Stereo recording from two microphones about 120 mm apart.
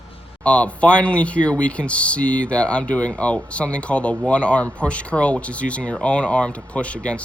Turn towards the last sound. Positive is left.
turn(degrees=10)  # may be behind; listen again after turning